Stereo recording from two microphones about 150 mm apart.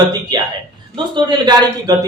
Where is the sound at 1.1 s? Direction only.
30° right (ahead or behind).